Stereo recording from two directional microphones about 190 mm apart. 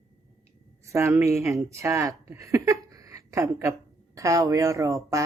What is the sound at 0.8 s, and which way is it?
A woman's voice, 15° right (ahead or behind).